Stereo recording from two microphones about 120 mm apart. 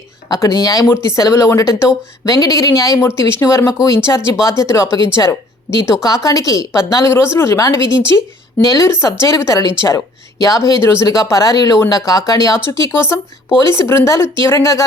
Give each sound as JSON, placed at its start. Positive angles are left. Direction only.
{"t": 0.3, "sound": "speech", "side_deg": 30}